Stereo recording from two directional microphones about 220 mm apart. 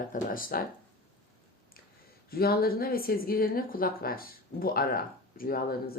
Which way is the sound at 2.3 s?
45° left (ahead or behind).